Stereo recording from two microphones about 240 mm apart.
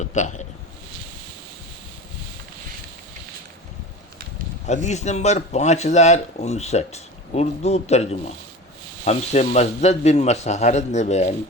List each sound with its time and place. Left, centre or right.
0.1 s speech: left
4.6 s speech: left